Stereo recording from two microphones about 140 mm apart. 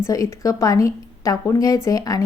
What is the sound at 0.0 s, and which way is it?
A woman's voice, 20° left (ahead or behind).